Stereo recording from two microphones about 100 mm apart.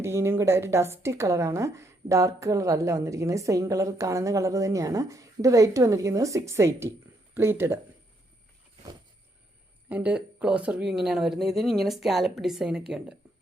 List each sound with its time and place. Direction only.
0.0 s a woman's voice: 25° right (ahead or behind)
9.9 s speech: 15° right (ahead or behind)